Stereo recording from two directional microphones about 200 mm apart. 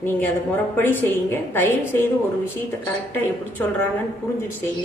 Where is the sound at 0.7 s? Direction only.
10° left (ahead or behind).